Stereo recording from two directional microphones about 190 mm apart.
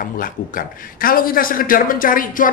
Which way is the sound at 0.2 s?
50° left (ahead or behind).